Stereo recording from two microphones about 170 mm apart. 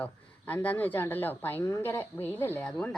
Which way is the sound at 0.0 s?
10° left (ahead or behind).